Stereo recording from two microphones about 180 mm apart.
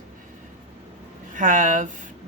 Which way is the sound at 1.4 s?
45° right (ahead or behind).